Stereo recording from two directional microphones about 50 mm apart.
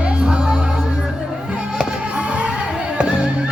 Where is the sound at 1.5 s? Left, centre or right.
Centre.